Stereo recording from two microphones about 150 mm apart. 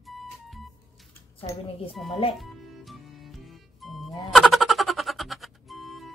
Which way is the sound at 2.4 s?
Centre (ahead or behind).